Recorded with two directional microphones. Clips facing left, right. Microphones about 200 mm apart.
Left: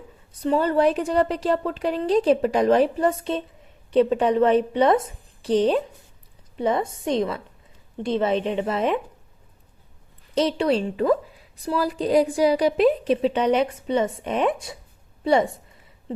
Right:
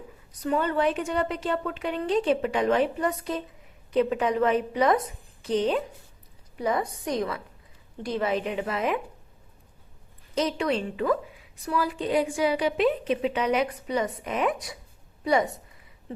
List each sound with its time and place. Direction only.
0.3 s a woman's voice: 30° left (ahead or behind)
10.3 s a woman's voice: 30° left (ahead or behind)